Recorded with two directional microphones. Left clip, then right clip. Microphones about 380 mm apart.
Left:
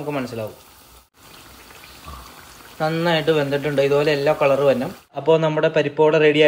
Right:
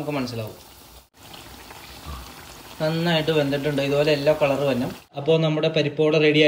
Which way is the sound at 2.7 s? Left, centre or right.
Left.